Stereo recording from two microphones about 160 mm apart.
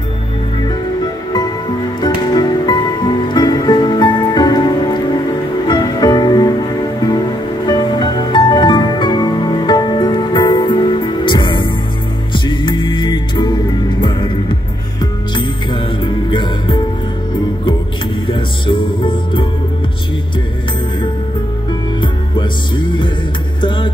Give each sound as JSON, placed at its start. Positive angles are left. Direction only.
{"t": 2.0, "sound": "music", "side_deg": 25}
{"t": 7.6, "sound": "music", "side_deg": 25}
{"t": 18.2, "sound": "music", "side_deg": 30}